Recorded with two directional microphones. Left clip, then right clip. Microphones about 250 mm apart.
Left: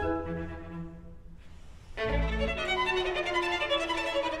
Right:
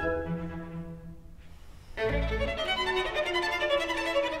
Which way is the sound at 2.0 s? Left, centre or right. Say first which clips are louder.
Right 1 dB; right.